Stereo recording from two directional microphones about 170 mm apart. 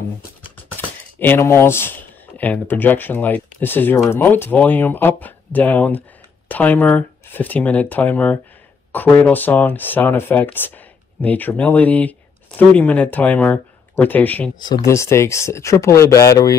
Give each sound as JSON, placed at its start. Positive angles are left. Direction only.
{"t": 0.7, "sound": "speech", "side_deg": 10}